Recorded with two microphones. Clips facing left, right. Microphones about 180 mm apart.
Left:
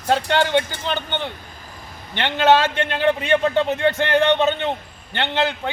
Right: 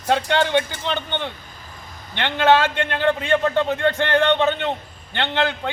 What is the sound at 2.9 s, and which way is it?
A man's voice, 20° left (ahead or behind).